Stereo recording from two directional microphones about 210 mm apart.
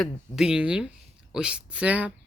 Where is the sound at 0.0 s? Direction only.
5° right (ahead or behind).